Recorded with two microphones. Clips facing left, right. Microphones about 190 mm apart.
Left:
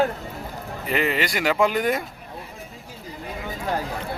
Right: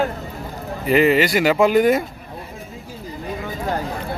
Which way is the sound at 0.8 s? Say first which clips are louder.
Right 9 dB; 5° right (ahead or behind).